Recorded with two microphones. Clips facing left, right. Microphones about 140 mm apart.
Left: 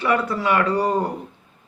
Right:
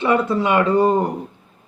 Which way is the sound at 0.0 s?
20° right (ahead or behind).